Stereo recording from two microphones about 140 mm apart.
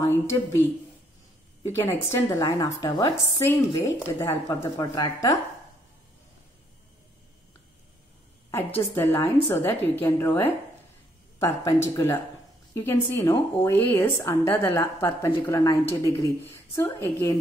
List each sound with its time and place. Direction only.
0.0 s a woman's voice: 20° left (ahead or behind)
1.7 s a woman's voice: 20° left (ahead or behind)
8.5 s a woman's voice: 20° left (ahead or behind)